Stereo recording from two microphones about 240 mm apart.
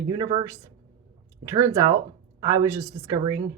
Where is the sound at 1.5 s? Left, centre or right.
Centre.